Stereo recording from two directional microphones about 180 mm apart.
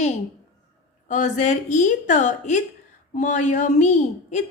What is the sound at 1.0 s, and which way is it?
A woman's voice, 45° left (ahead or behind).